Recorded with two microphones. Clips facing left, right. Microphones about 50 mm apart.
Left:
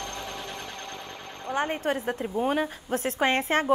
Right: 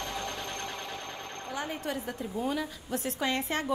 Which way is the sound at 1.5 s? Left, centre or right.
Left.